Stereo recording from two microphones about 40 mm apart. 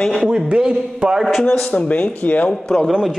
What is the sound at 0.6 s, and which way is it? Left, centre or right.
Speech, centre.